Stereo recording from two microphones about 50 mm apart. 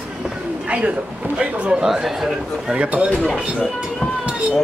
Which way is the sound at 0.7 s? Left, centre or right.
Right.